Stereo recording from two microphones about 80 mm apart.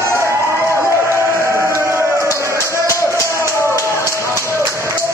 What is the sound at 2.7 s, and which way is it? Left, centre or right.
Music, left.